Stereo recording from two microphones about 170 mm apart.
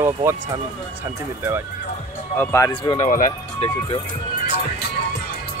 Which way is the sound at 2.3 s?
15° left (ahead or behind).